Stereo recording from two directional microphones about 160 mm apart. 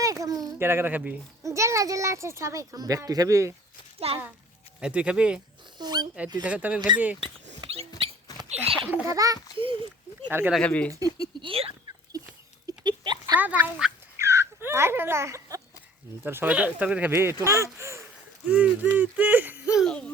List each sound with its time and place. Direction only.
0.0 s a sound: 20° right (ahead or behind)
1.4 s speech: 20° right (ahead or behind)
4.1 s a child's voice: 40° right (ahead or behind)
4.8 s speech: 5° right (ahead or behind)
5.8 s speech: 25° right (ahead or behind)
6.4 s speech: 10° right (ahead or behind)
8.6 s a sound: 35° right (ahead or behind)
9.0 s speech: 20° right (ahead or behind)
10.5 s speech: 10° left (ahead or behind)
11.0 s speech: 25° right (ahead or behind)
12.6 s a sound: 25° right (ahead or behind)
13.3 s speech: 10° right (ahead or behind)
14.2 s a sound: 15° right (ahead or behind)
16.2 s speech: 15° right (ahead or behind); by 20.1 s 5° left (ahead or behind)